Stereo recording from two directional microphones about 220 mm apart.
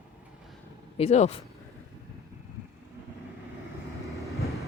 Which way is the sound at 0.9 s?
30° left (ahead or behind).